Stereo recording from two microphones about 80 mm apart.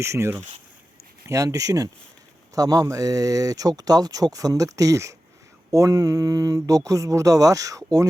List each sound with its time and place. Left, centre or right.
0.0 s speech: right
1.3 s speech: right